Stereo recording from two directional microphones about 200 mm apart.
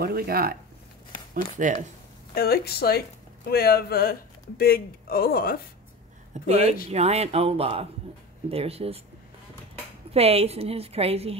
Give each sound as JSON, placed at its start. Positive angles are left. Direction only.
{"t": 0.0, "sound": "a woman's voice", "side_deg": -50}
{"t": 2.3, "sound": "speech", "side_deg": 50}
{"t": 6.3, "sound": "a woman's voice", "side_deg": -35}
{"t": 10.1, "sound": "a woman's voice", "side_deg": -30}